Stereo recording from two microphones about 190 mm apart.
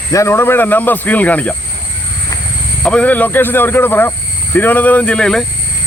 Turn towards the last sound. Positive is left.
turn(degrees=5)  # may be behind; listen again after turning